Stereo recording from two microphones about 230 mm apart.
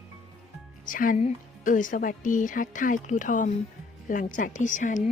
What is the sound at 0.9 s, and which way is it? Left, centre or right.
A woman's voice, left.